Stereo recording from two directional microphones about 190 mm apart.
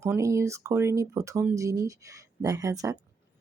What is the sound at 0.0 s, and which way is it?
Speech, 15° right (ahead or behind).